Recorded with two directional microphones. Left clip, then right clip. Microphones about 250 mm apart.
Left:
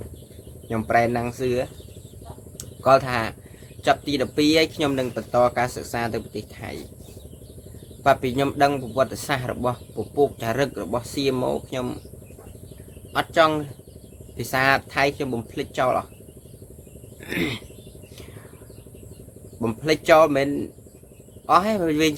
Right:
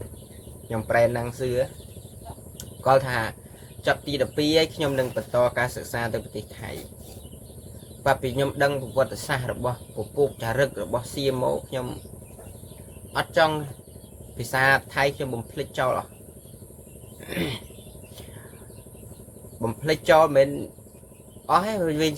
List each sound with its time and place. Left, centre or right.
0.7 s speech: centre
8.0 s speech: centre
13.1 s speech: centre
17.2 s speech: centre
19.6 s a man's voice: centre